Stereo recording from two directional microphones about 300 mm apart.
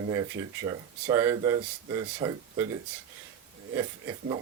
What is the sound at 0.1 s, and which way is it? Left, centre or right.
Speech, centre.